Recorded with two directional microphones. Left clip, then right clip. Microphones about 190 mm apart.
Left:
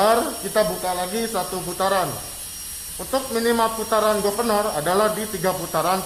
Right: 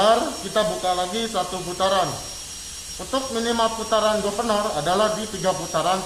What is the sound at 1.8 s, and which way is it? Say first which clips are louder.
Speech: even; 35° left (ahead or behind).